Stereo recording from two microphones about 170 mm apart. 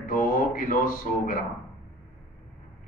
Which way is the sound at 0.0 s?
55° left (ahead or behind).